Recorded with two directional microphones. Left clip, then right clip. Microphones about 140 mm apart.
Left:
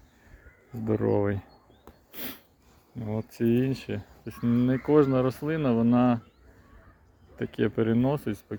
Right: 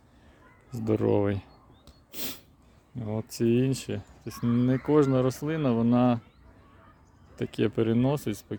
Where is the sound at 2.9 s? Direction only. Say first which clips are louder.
Even; 45° right (ahead or behind).